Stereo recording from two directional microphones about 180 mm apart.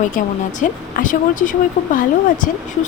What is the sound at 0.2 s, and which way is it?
Speech, 45° left (ahead or behind).